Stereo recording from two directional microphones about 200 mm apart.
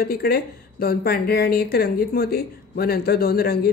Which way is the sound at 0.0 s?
50° left (ahead or behind).